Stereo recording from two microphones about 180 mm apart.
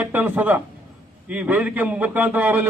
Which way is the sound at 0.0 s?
10° right (ahead or behind).